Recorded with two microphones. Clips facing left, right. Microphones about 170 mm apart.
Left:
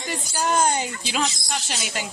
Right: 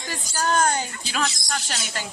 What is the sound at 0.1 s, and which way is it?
Speech, 15° left (ahead or behind).